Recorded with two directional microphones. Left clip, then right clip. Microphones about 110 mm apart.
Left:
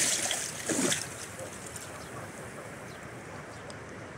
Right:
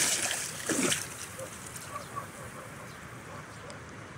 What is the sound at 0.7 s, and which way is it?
Splash, 40° left (ahead or behind).